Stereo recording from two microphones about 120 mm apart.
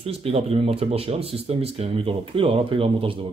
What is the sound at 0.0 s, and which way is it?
Speech, 55° right (ahead or behind).